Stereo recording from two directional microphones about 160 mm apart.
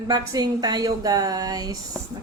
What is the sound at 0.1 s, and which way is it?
Speech, 25° right (ahead or behind).